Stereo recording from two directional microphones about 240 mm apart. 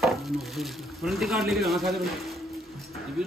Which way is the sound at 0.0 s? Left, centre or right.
Centre.